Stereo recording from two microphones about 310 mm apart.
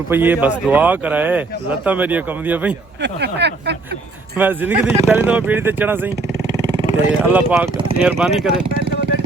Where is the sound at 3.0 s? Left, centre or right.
Right.